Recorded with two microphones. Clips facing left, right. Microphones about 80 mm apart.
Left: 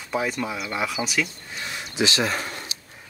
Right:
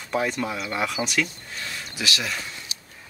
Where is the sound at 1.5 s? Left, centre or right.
Left.